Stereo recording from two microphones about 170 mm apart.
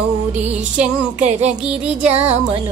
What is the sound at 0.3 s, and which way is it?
Music, 10° right (ahead or behind).